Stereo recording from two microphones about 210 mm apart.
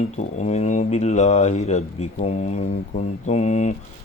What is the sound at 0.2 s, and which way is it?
Speech, 35° left (ahead or behind).